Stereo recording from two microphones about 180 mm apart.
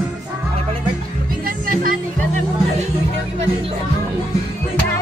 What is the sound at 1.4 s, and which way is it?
Music, 50° right (ahead or behind).